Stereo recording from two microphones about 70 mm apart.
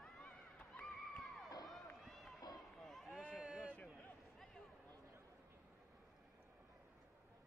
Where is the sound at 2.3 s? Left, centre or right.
Left.